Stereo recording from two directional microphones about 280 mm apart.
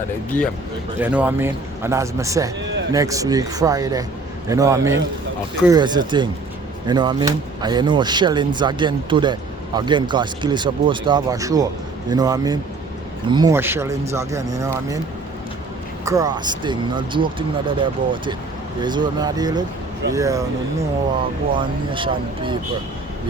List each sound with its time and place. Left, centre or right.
0.9 s speech: centre
16.0 s speech: centre
21.5 s speech: centre